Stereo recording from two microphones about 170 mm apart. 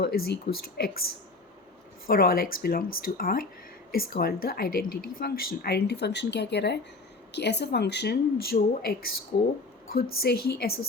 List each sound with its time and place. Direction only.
0.0 s speech: 65° left (ahead or behind)